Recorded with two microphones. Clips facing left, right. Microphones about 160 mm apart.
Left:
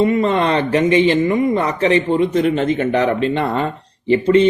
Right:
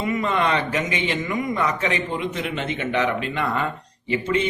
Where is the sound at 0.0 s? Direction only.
30° left (ahead or behind).